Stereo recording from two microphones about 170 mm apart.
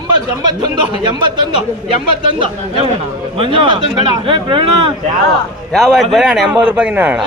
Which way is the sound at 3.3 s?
30° right (ahead or behind).